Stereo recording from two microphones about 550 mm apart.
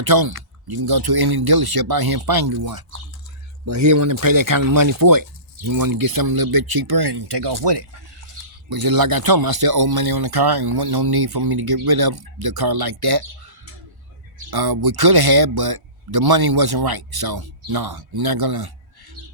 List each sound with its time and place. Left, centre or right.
0.0 s speech: right
14.3 s speech: right